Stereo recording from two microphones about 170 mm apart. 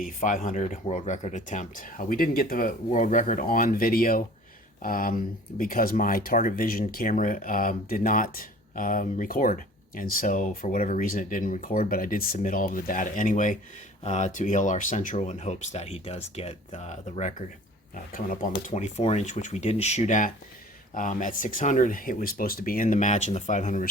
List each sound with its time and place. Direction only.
0.0 s speech: 50° left (ahead or behind)